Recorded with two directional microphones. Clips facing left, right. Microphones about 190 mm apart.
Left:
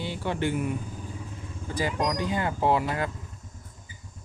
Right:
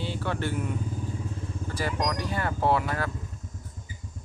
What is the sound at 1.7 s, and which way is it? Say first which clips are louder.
Speech: left 2 dB; 15° left (ahead or behind).